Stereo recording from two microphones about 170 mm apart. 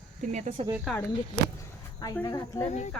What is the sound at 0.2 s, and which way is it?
Speech, 45° right (ahead or behind).